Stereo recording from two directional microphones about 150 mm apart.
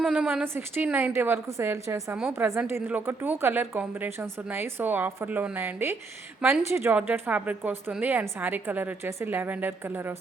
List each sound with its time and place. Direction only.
0.0 s a woman's voice: 5° right (ahead or behind)